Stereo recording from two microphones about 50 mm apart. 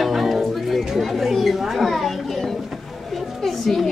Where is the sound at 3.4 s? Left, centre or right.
Centre.